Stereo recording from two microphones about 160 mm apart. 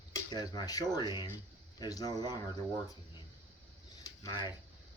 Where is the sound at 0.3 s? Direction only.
25° left (ahead or behind).